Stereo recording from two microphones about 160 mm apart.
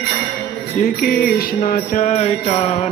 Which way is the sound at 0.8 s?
55° left (ahead or behind).